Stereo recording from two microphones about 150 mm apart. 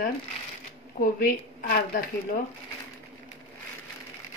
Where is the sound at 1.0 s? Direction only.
65° left (ahead or behind).